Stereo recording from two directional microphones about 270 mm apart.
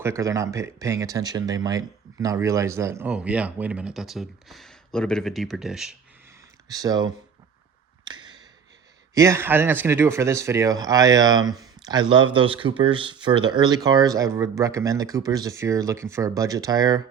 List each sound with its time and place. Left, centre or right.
0.0 s speech: centre
6.7 s speech: centre
8.0 s a sound: centre
9.1 s speech: centre